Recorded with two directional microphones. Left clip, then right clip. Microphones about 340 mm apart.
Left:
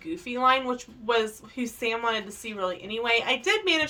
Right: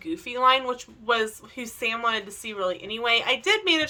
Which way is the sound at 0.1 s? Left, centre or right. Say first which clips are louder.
Right 2 dB; centre.